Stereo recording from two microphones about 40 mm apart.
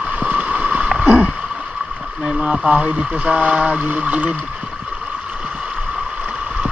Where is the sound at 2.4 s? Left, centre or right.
Right.